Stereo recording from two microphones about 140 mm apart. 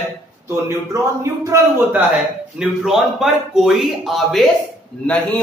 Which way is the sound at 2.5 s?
5° right (ahead or behind).